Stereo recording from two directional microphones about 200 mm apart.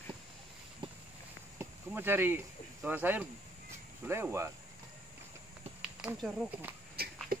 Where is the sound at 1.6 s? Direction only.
10° right (ahead or behind).